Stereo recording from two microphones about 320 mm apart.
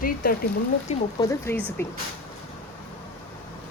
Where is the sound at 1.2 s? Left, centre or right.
Centre.